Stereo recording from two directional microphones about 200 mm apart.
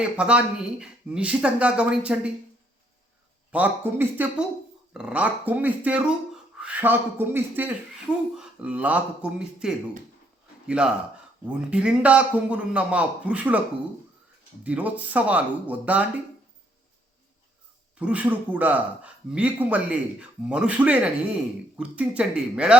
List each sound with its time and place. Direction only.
0.0 s speech: 5° right (ahead or behind)
3.5 s a man's voice: 10° right (ahead or behind)
14.6 s a man's voice: 10° right (ahead or behind)
17.9 s a man's voice: 5° right (ahead or behind)